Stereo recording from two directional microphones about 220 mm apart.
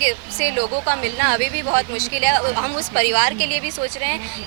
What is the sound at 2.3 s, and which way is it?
Speech, 25° right (ahead or behind).